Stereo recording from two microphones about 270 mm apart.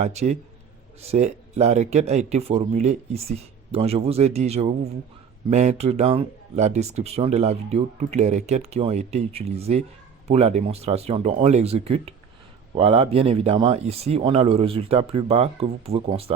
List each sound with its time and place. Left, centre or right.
0.0 s speech: right